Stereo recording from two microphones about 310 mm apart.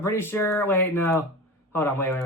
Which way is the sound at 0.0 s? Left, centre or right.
Centre.